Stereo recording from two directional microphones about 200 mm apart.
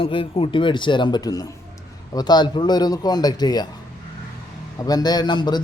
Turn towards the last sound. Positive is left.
turn(degrees=20)  # may be behind; listen again after turning